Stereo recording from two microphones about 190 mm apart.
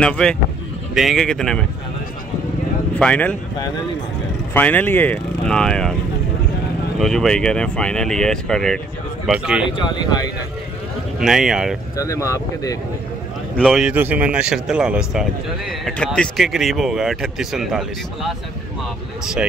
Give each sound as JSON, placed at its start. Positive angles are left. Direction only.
{"t": 0.0, "sound": "a man's voice", "side_deg": 5}
{"t": 3.0, "sound": "speech", "side_deg": 5}
{"t": 4.6, "sound": "speech", "side_deg": 10}
{"t": 7.0, "sound": "a man's voice", "side_deg": 0}
{"t": 9.7, "sound": "speech", "side_deg": 25}
{"t": 11.1, "sound": "a man's voice", "side_deg": 0}
{"t": 12.0, "sound": "speech", "side_deg": 15}
{"t": 13.6, "sound": "a man's voice", "side_deg": 0}